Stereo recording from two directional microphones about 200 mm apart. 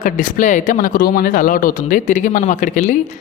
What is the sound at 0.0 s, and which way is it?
Speech, 40° left (ahead or behind).